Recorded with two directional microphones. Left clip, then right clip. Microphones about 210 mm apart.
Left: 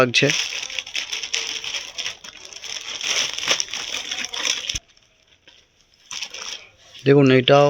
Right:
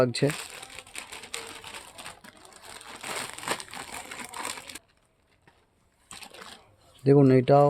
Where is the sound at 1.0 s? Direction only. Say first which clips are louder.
Left 13 dB; 50° right (ahead or behind).